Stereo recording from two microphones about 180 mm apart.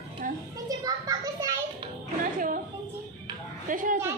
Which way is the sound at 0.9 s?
20° right (ahead or behind).